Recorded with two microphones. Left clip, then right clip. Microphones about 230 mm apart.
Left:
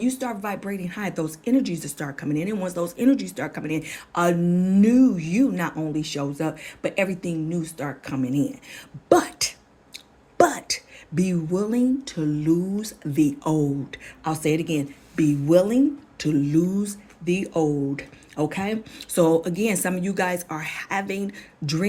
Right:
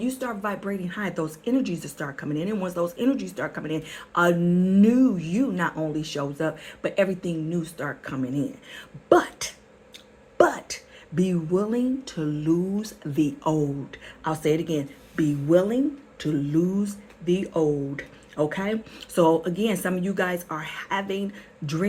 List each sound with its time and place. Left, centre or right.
0.0 s speech: left
17.9 s speech: left